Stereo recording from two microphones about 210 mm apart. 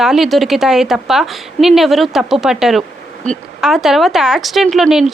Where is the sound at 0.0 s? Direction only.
Centre (ahead or behind).